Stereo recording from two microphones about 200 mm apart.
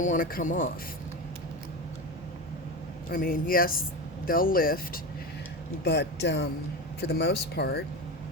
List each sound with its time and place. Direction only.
0.0 s speech: 40° left (ahead or behind)
3.1 s speech: 45° left (ahead or behind)
5.8 s speech: 60° left (ahead or behind)